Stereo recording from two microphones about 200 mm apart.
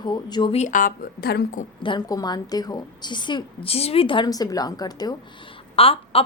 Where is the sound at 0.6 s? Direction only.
40° left (ahead or behind).